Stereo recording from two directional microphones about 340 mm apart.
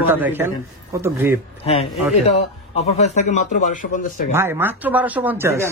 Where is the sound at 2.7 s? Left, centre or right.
Centre.